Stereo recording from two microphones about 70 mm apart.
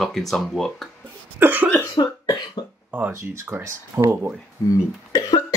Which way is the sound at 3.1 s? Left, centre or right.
Right.